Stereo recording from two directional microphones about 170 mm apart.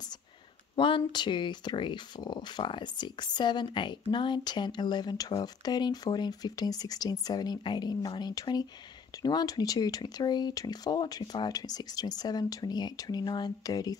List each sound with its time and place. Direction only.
0.7 s speech: 30° left (ahead or behind)